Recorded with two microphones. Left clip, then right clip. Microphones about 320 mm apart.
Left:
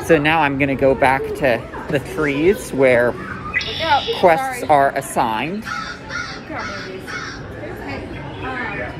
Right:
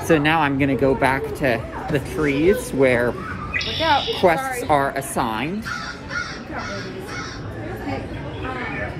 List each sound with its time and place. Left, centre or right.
0.1 s a man's voice: centre
3.5 s music: centre
4.2 s a man's voice: centre